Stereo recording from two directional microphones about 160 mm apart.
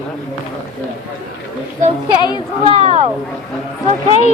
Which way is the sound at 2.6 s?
35° right (ahead or behind).